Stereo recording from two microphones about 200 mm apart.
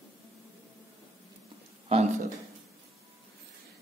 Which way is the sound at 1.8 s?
35° right (ahead or behind).